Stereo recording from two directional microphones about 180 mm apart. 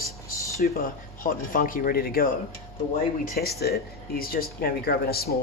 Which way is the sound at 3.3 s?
60° left (ahead or behind).